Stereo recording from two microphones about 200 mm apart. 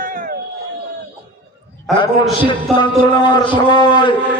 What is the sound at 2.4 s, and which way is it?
A man's voice, 25° left (ahead or behind).